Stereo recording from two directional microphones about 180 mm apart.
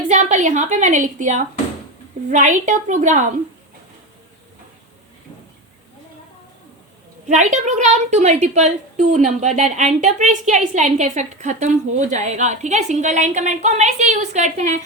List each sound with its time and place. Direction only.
0.1 s a woman's voice: 40° right (ahead or behind)
7.3 s a woman's voice: 40° right (ahead or behind)